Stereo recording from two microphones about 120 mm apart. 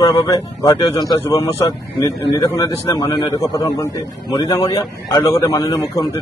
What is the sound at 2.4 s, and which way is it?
A man's voice, 35° left (ahead or behind).